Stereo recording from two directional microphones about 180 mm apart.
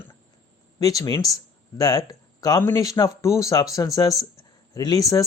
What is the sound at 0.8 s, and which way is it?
Speech, 20° left (ahead or behind).